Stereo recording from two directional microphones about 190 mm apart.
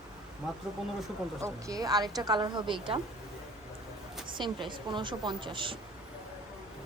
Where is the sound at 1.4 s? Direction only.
15° right (ahead or behind).